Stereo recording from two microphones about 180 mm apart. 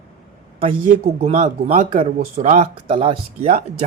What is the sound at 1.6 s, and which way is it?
Speech, 50° right (ahead or behind).